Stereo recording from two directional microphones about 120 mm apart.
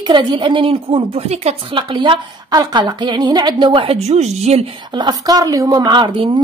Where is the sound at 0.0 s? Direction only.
40° right (ahead or behind); by 4.7 s 65° right (ahead or behind).